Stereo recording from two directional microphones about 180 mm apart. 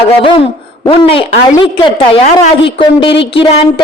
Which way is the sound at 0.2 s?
30° left (ahead or behind).